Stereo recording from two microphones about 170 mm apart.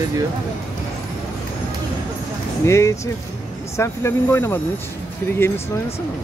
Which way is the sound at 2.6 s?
15° left (ahead or behind).